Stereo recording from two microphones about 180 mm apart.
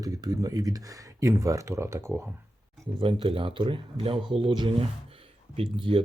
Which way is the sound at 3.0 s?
30° right (ahead or behind).